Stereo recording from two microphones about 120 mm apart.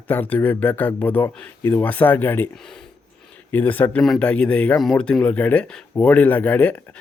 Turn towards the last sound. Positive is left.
turn(degrees=15)  # may be behind; listen again after turning